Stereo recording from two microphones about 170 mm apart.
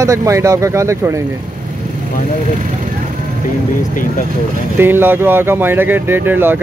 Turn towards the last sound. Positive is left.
turn(degrees=-10)  # may be behind; listen again after turning